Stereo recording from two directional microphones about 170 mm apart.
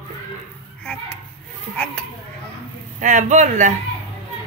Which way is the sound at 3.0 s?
50° right (ahead or behind).